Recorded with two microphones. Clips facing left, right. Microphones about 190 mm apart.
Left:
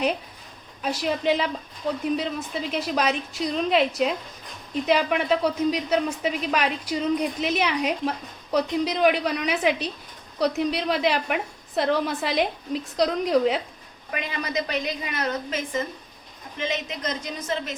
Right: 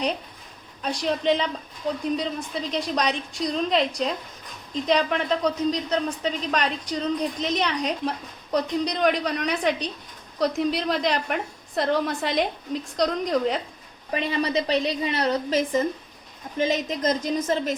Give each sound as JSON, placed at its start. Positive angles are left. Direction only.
{"t": 0.8, "sound": "a woman's voice", "side_deg": 5}
{"t": 14.1, "sound": "a woman's voice", "side_deg": -30}